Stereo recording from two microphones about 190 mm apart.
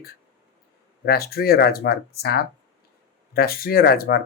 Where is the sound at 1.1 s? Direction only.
55° left (ahead or behind).